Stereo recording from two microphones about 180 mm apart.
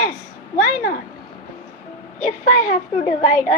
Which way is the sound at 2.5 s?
45° left (ahead or behind).